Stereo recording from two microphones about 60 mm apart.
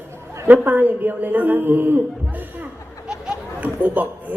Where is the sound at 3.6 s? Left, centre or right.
Right.